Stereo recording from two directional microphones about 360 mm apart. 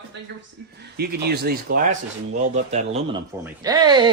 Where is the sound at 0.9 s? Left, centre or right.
Right.